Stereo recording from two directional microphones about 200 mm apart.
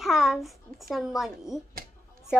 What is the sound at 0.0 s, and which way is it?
A child's voice, centre (ahead or behind).